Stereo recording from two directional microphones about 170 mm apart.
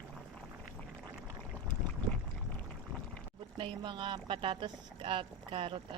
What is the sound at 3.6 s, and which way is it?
Speech, 30° right (ahead or behind).